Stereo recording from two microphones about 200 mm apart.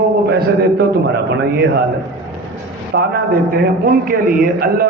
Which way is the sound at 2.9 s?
50° right (ahead or behind).